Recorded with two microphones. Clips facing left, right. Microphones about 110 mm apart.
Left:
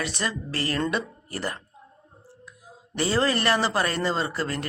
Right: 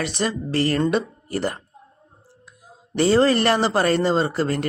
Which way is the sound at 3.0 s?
30° right (ahead or behind).